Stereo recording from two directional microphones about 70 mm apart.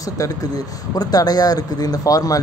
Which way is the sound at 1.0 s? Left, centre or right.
Left.